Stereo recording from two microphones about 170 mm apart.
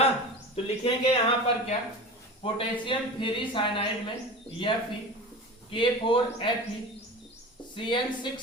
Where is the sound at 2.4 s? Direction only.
30° left (ahead or behind).